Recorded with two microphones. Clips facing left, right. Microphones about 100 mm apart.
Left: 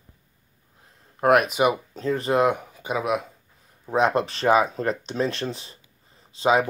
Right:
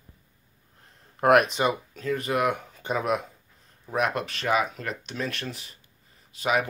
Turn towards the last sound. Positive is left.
turn(degrees=30)  # may be behind; listen again after turning